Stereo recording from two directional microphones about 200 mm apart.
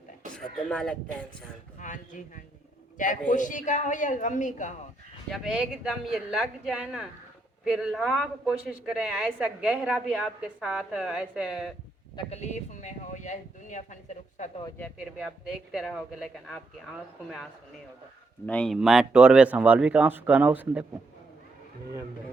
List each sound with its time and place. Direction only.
0.7 s speech: 5° left (ahead or behind)
1.8 s speech: 40° left (ahead or behind)
5.3 s speech: centre (ahead or behind)
12.1 s speech: 35° left (ahead or behind)
15.7 s speech: centre (ahead or behind)
18.4 s speech: 5° left (ahead or behind)